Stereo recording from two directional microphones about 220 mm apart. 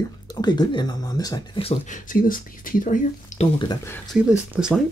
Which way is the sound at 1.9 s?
40° left (ahead or behind).